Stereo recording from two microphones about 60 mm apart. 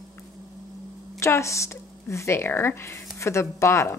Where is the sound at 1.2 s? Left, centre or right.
Left.